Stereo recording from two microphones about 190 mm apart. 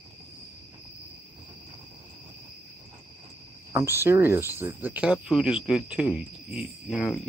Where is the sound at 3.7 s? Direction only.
10° right (ahead or behind).